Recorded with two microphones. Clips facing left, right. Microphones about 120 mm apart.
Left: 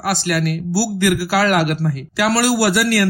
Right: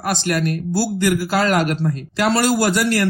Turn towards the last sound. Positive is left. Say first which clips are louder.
# left 1 dB
turn(degrees=5)  # may be behind; listen again after turning